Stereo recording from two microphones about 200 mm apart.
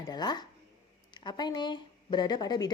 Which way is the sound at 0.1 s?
20° left (ahead or behind).